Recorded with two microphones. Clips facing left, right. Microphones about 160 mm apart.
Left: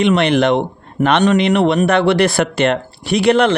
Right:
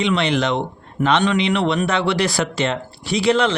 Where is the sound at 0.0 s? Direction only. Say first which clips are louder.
Left 6 dB; 55° left (ahead or behind).